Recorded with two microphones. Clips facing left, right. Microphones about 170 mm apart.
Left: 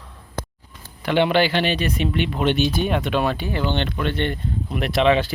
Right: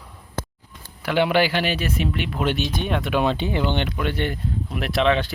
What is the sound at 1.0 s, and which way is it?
Speech, 5° right (ahead or behind).